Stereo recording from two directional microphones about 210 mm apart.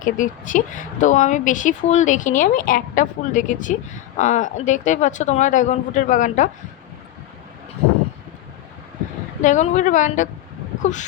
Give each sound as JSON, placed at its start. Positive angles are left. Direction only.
{"t": 0.0, "sound": "speech", "side_deg": 40}
{"t": 9.4, "sound": "speech", "side_deg": 35}